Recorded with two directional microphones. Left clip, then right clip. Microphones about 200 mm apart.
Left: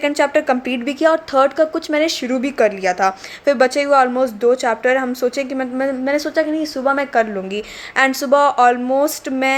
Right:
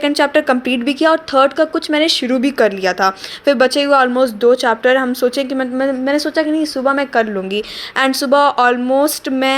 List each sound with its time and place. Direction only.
0.0 s speech: 20° right (ahead or behind)